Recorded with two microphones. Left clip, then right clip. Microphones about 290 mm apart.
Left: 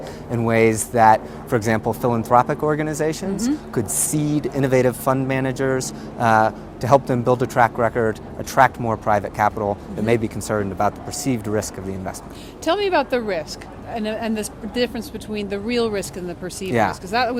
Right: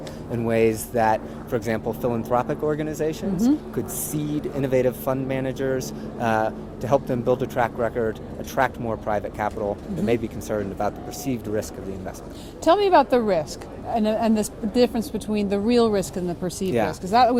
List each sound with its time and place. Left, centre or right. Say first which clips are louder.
0.3 s speech: left 3 dB; left
12.6 s speech: right 2 dB; right